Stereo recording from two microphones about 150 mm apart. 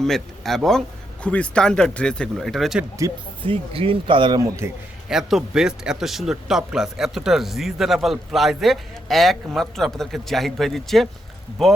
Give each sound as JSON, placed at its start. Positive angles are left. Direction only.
{"t": 0.0, "sound": "a man's voice", "side_deg": 0}
{"t": 3.4, "sound": "speech", "side_deg": -35}
{"t": 5.0, "sound": "a man's voice", "side_deg": -5}